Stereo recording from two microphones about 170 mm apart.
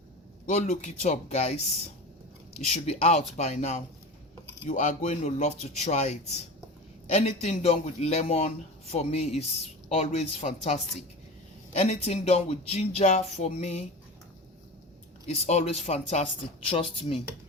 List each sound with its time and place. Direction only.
0.5 s speech: 45° left (ahead or behind)
2.6 s speech: 40° left (ahead or behind)
15.3 s speech: 40° left (ahead or behind)